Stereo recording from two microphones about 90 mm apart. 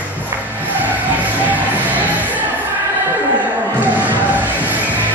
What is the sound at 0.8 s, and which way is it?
Music, 20° right (ahead or behind).